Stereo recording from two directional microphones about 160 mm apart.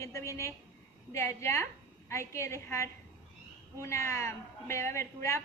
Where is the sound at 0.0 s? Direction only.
20° left (ahead or behind).